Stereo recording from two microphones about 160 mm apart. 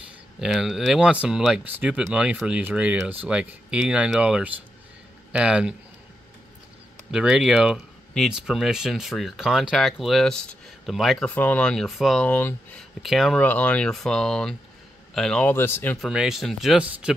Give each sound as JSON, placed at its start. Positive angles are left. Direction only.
{"t": 0.4, "sound": "speech", "side_deg": -5}
{"t": 7.1, "sound": "speech", "side_deg": -5}
{"t": 12.3, "sound": "speech", "side_deg": 15}
{"t": 13.0, "sound": "speech", "side_deg": 0}
{"t": 16.1, "sound": "speech", "side_deg": -5}